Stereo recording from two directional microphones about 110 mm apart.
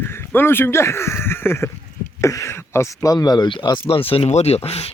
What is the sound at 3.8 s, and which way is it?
Speech, 55° left (ahead or behind).